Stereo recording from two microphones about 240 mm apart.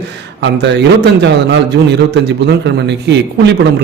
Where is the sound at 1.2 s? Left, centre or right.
Right.